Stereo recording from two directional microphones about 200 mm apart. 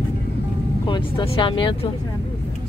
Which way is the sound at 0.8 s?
25° left (ahead or behind).